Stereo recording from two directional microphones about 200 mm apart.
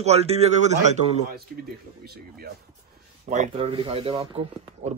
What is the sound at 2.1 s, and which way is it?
Speech, 50° right (ahead or behind).